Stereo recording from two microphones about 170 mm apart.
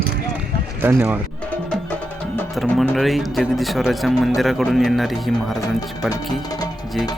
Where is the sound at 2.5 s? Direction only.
5° left (ahead or behind).